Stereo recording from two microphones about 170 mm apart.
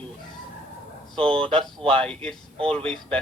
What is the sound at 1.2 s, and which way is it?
Speech, 5° left (ahead or behind).